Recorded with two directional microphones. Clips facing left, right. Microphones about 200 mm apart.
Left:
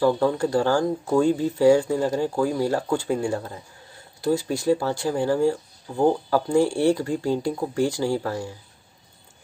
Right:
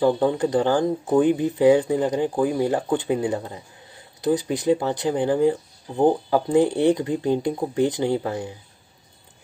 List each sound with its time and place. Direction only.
0.0 s speech: 20° right (ahead or behind)